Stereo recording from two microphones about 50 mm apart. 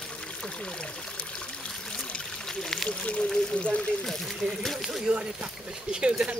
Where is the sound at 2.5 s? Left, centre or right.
Centre.